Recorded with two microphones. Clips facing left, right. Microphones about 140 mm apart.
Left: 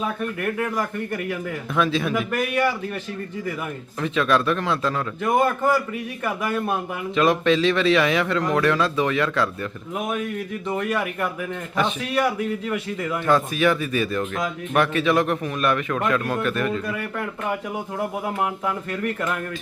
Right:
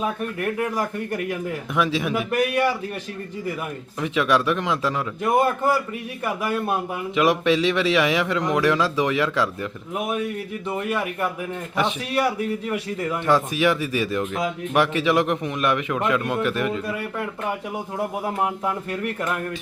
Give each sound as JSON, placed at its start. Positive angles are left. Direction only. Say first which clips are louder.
{"t": 0.4, "sound": "a man's voice", "louder": "right 1 dB", "side_deg": -10}
{"t": 4.0, "sound": "a man's voice", "louder": "even", "side_deg": -15}